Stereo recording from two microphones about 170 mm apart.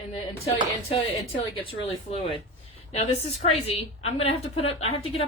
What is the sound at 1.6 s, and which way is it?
A woman's voice, 35° left (ahead or behind).